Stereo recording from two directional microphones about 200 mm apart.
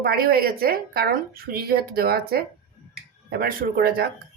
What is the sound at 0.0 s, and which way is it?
A woman's voice, 50° right (ahead or behind).